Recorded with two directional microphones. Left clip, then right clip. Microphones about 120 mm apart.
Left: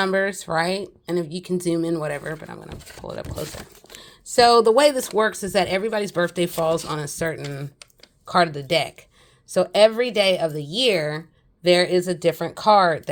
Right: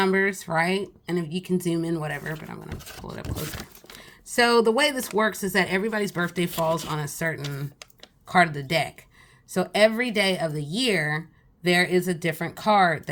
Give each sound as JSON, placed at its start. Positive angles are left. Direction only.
{"t": 0.0, "sound": "speech", "side_deg": 40}
{"t": 2.6, "sound": "speech", "side_deg": 35}
{"t": 4.4, "sound": "speech", "side_deg": 45}